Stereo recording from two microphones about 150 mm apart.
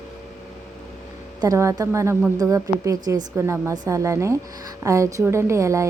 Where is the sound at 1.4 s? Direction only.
20° right (ahead or behind).